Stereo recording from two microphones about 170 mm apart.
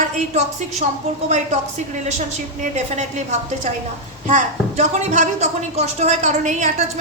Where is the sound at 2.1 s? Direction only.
45° right (ahead or behind).